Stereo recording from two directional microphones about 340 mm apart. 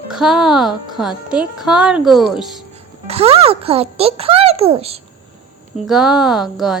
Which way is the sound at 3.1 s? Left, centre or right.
Centre.